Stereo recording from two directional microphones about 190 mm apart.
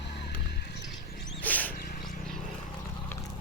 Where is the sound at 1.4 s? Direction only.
10° left (ahead or behind).